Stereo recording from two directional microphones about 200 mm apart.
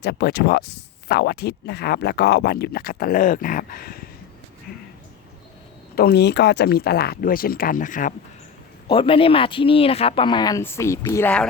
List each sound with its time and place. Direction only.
0.0 s speech: 55° left (ahead or behind)
6.0 s speech: 55° left (ahead or behind)
8.9 s speech: 25° left (ahead or behind); by 11.4 s 10° left (ahead or behind)